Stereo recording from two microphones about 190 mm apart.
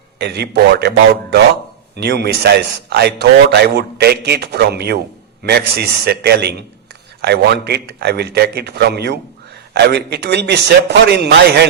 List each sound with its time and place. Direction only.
0.2 s a man's voice: 60° right (ahead or behind)